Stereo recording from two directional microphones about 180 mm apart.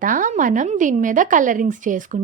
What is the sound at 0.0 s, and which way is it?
A woman's voice, 45° right (ahead or behind).